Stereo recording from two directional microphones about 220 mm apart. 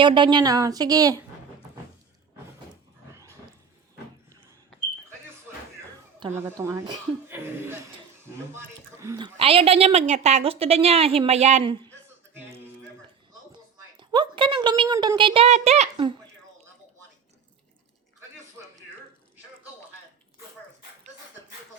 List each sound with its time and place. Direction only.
0.0 s a woman's voice: 20° right (ahead or behind)
6.3 s a woman's voice: 15° right (ahead or behind)
9.0 s a woman's voice: 15° right (ahead or behind)
13.5 s a woman's voice: 20° right (ahead or behind)